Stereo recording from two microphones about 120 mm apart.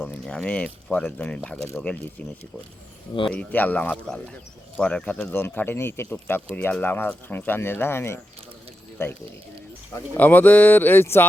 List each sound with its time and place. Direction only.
0.0 s speech: 5° left (ahead or behind)
3.3 s speech: 15° left (ahead or behind)
9.9 s speech: 15° left (ahead or behind)